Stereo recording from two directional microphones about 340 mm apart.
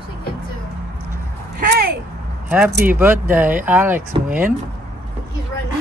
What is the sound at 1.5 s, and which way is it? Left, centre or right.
Speech, right.